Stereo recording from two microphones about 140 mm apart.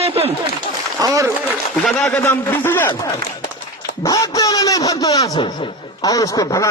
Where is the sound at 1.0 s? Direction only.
25° right (ahead or behind).